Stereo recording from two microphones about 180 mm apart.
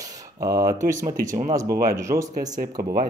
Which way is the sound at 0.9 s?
45° right (ahead or behind).